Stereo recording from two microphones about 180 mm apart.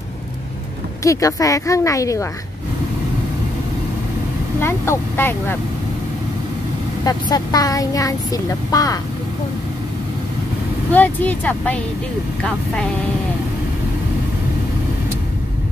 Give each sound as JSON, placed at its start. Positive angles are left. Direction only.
{"t": 1.0, "sound": "speech", "side_deg": 20}
{"t": 4.6, "sound": "speech", "side_deg": 15}
{"t": 7.1, "sound": "speech", "side_deg": 20}
{"t": 10.9, "sound": "speech", "side_deg": 10}